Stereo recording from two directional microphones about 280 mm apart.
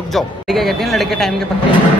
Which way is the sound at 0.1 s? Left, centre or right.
Centre.